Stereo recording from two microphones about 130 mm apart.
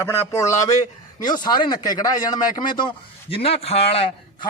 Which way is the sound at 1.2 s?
35° left (ahead or behind).